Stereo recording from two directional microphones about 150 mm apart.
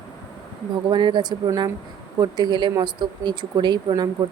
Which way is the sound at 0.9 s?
30° right (ahead or behind).